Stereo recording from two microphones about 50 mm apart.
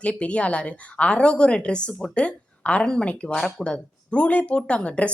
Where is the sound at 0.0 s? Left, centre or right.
Left.